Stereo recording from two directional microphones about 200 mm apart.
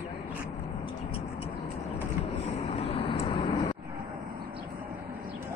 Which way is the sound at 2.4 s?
30° left (ahead or behind).